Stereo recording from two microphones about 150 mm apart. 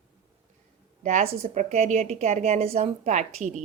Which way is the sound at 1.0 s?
50° right (ahead or behind).